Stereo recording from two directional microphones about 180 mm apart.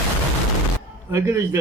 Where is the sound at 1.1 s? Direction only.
15° right (ahead or behind).